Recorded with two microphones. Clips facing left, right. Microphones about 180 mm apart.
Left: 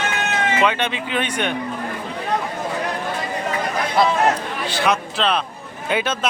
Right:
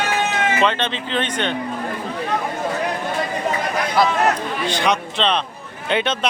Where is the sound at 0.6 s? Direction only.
10° left (ahead or behind).